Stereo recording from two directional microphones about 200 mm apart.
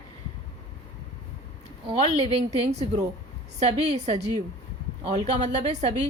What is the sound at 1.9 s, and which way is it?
Speech, 30° right (ahead or behind).